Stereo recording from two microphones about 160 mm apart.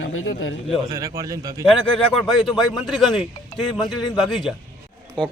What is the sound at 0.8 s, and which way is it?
Speech, 20° right (ahead or behind).